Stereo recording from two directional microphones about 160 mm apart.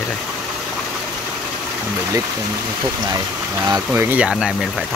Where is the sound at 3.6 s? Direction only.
25° right (ahead or behind).